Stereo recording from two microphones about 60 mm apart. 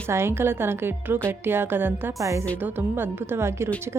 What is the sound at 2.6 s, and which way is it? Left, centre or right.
A woman's voice, right.